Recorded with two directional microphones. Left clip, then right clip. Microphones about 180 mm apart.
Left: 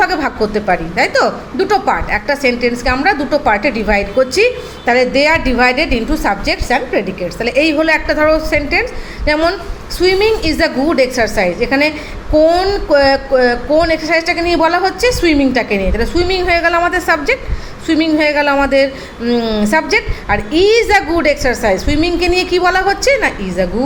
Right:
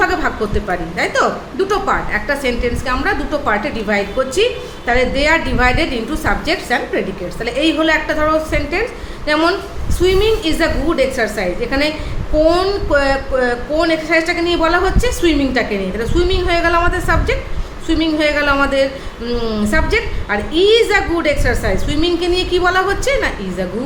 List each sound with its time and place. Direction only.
0.0 s a woman's voice: 25° left (ahead or behind)